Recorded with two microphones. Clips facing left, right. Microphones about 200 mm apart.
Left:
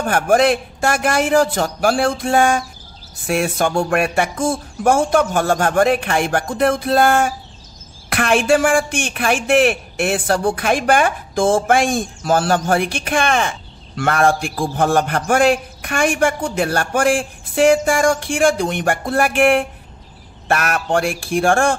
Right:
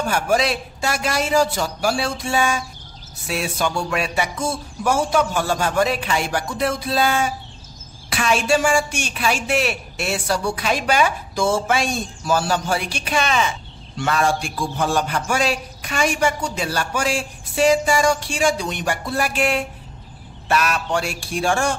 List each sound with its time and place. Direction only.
0.0 s a woman's voice: 50° left (ahead or behind)